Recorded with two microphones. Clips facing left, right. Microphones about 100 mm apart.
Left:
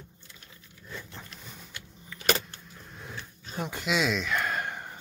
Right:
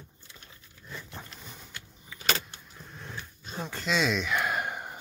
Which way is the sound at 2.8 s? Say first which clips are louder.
Even; centre (ahead or behind).